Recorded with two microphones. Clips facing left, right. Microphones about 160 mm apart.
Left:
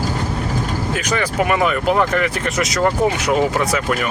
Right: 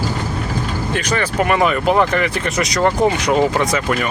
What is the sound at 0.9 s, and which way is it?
Speech, 5° left (ahead or behind).